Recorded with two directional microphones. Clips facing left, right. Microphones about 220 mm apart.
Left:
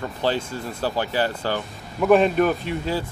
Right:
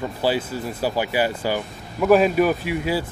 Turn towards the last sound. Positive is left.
turn(degrees=-10)  # may be behind; listen again after turning